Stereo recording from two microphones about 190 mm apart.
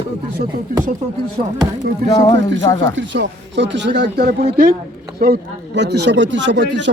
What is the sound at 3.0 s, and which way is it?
Speech, 70° right (ahead or behind).